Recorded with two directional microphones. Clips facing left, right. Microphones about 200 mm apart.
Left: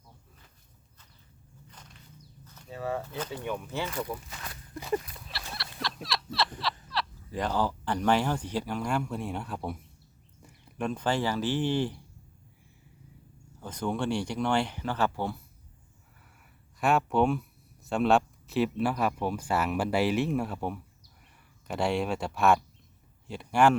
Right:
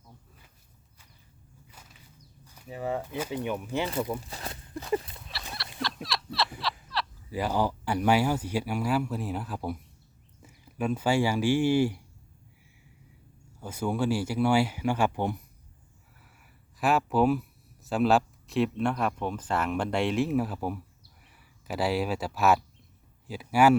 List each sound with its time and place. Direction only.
1.6 s walk: 5° right (ahead or behind)
2.4 s speech: 15° right (ahead or behind)
3.8 s speech: 30° right (ahead or behind)
5.1 s a sound: centre (ahead or behind)
6.7 s speech: centre (ahead or behind)
13.6 s speech: 10° right (ahead or behind)
16.2 s a sound: centre (ahead or behind)
17.8 s speech: centre (ahead or behind)